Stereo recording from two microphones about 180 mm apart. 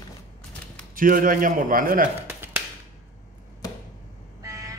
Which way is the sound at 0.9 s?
50° right (ahead or behind).